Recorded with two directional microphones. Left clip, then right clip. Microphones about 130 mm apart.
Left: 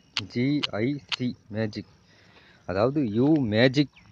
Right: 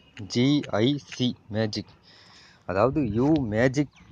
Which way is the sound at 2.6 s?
20° left (ahead or behind).